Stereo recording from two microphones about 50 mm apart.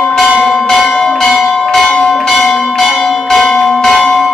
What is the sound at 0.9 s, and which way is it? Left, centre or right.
Church bell, centre.